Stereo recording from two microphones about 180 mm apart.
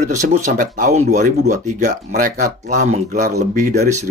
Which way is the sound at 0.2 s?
40° right (ahead or behind).